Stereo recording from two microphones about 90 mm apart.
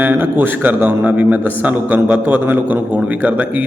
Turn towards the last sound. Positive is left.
turn(degrees=-20)  # may be behind; listen again after turning